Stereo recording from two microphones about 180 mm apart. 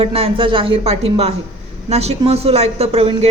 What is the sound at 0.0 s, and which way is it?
A woman's voice, 30° right (ahead or behind).